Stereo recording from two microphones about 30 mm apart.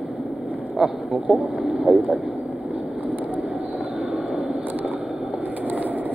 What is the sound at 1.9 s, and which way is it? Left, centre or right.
Speech, right.